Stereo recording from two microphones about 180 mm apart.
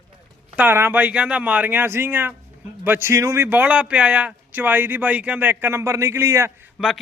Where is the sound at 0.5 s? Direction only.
10° right (ahead or behind).